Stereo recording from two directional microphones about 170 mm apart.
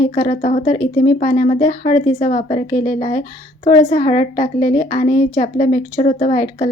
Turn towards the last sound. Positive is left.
turn(degrees=40)  # may be behind; listen again after turning